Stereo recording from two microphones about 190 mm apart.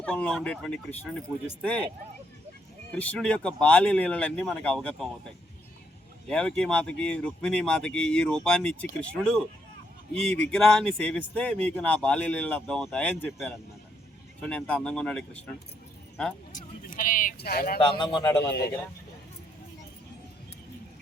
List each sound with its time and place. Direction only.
0.0 s speech: 5° left (ahead or behind)
2.9 s speech: 5° left (ahead or behind)
6.2 s speech: 5° left (ahead or behind)
10.5 s speech: 5° left (ahead or behind)
16.5 s speech: 45° left (ahead or behind)
17.7 s a man's voice: 25° left (ahead or behind)
18.3 s speech: 15° left (ahead or behind)